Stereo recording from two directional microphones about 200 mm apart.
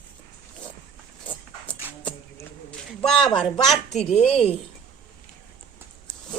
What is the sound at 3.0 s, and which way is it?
Speech, centre (ahead or behind).